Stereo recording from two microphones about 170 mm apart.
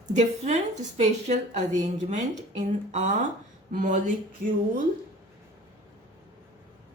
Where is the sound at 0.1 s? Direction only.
40° right (ahead or behind).